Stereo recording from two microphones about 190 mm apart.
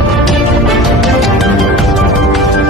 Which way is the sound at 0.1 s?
Centre (ahead or behind).